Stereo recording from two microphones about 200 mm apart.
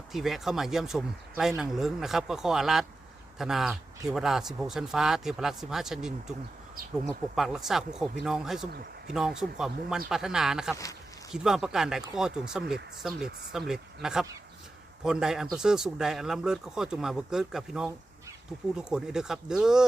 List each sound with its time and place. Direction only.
0.1 s speech: centre (ahead or behind)